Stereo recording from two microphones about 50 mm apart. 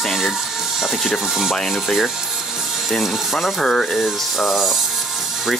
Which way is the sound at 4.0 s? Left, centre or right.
Centre.